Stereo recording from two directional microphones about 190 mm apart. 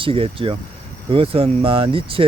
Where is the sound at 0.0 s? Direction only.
30° right (ahead or behind).